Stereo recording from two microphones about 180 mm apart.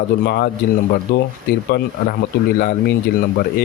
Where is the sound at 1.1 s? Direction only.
70° left (ahead or behind).